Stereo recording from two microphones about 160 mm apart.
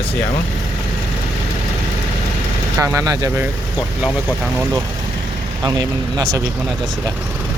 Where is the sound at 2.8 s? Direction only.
15° right (ahead or behind).